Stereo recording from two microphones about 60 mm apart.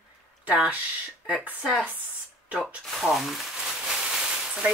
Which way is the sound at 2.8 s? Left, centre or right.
Centre.